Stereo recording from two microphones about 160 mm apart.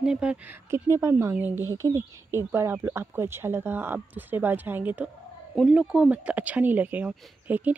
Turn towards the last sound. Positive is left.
turn(degrees=-10)  # may be behind; listen again after turning